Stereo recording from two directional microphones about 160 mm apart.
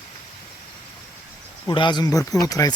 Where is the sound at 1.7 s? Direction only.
30° left (ahead or behind).